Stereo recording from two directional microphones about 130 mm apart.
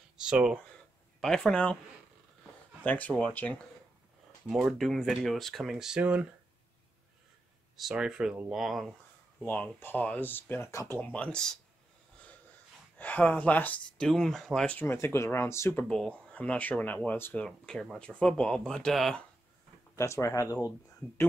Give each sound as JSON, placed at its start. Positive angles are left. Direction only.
{"t": 0.2, "sound": "speech", "side_deg": -5}
{"t": 2.8, "sound": "speech", "side_deg": 10}
{"t": 4.5, "sound": "speech", "side_deg": -5}
{"t": 7.7, "sound": "speech", "side_deg": -5}
{"t": 9.4, "sound": "speech", "side_deg": 15}
{"t": 12.9, "sound": "speech", "side_deg": 10}
{"t": 15.9, "sound": "speech", "side_deg": 5}
{"t": 20.0, "sound": "speech", "side_deg": 20}